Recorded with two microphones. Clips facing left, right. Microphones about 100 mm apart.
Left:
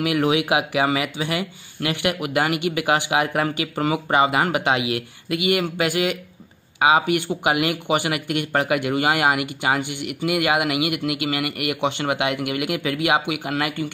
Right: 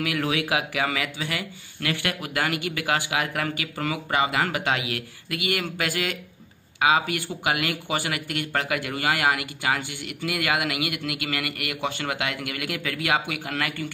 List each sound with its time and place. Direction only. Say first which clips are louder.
0.0 s speech: left 6 dB; 20° left (ahead or behind)